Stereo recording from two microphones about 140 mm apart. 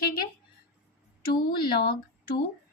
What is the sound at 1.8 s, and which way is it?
Speech, 90° left.